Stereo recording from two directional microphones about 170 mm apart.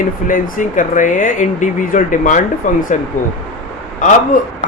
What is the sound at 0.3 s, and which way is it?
Speech, 55° left (ahead or behind).